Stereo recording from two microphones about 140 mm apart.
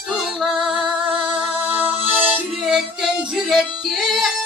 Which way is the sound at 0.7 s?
35° right (ahead or behind).